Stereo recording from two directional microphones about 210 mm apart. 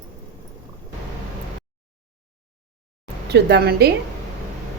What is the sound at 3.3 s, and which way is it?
Cutlery, 50° right (ahead or behind).